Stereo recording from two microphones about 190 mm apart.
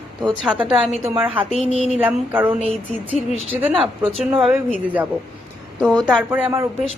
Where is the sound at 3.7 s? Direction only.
30° right (ahead or behind).